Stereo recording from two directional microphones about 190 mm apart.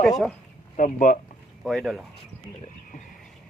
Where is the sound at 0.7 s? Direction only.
45° left (ahead or behind).